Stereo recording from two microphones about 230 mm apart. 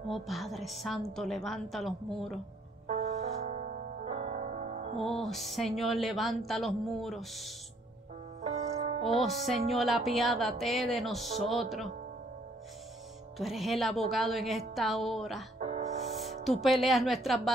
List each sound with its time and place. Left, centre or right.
0.1 s speech: centre
2.9 s music: right
5.2 s speech: centre
8.4 s music: right
9.0 s speech: centre
13.4 s speech: centre
15.6 s music: right
16.2 s music: centre
16.6 s speech: centre